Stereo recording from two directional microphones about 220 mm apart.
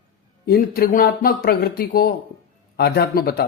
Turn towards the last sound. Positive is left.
turn(degrees=45)  # may be behind; listen again after turning